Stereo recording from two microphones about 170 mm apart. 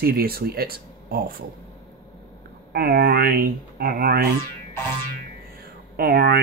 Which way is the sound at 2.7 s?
60° right (ahead or behind).